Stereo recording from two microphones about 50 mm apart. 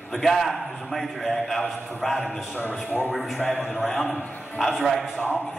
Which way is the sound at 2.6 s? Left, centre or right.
Left.